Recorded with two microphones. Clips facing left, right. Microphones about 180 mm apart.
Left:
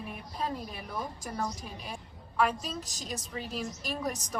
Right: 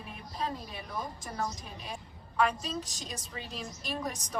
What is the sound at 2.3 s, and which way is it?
A woman's voice, 5° left (ahead or behind).